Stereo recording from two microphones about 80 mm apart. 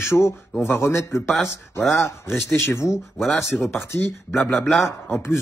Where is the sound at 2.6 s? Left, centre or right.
Left.